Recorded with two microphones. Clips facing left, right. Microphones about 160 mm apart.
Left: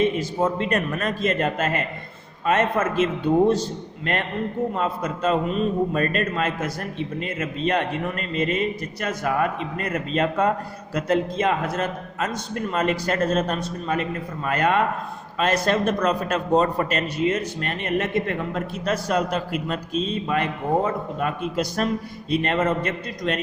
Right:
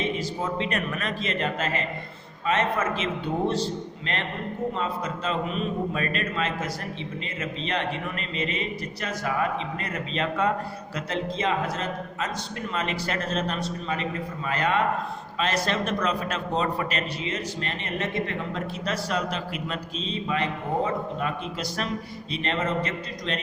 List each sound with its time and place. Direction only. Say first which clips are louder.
0.0 s a man's voice: left 7 dB; 50° left (ahead or behind)